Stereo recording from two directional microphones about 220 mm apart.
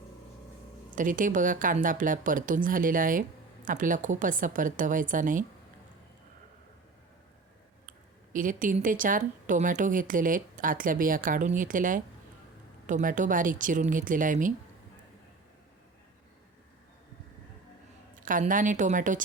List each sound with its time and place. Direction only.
0.9 s a woman's voice: 35° right (ahead or behind)
8.3 s a woman's voice: 35° right (ahead or behind)
18.2 s a woman's voice: 35° right (ahead or behind)